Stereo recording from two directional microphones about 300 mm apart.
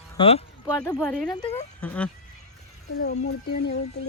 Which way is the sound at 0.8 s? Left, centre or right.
Centre.